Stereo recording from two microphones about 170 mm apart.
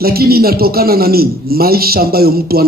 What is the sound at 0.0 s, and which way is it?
A man's voice, 65° right (ahead or behind).